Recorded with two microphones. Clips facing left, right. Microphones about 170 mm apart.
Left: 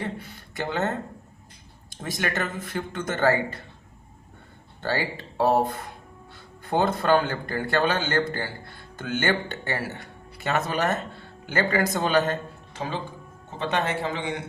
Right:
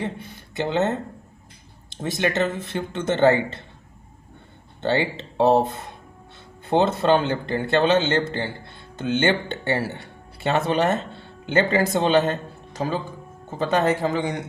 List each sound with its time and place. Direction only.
0.0 s a sound: 20° right (ahead or behind)
1.9 s speech: 25° right (ahead or behind)
4.8 s speech: 25° right (ahead or behind)
12.7 s speech: 40° right (ahead or behind)